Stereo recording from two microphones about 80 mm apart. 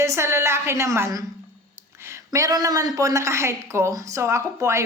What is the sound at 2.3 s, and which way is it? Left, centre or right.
A woman's voice, right.